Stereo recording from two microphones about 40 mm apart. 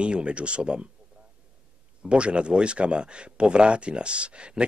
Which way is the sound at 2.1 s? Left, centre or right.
Right.